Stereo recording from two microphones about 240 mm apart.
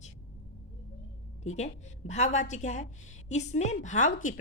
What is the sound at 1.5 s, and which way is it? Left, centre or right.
A woman's voice, left.